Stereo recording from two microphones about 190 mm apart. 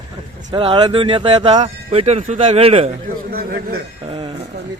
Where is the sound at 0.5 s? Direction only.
25° right (ahead or behind).